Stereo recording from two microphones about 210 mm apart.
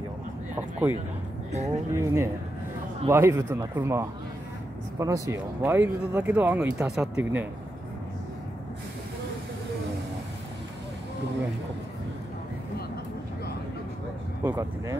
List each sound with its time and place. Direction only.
0.6 s a sound: 10° right (ahead or behind)
1.5 s speech: 35° right (ahead or behind)
1.9 s speech: 15° right (ahead or behind)
14.4 s speech: 10° right (ahead or behind)